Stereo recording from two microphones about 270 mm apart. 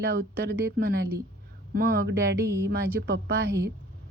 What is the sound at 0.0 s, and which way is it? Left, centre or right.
Speech, right.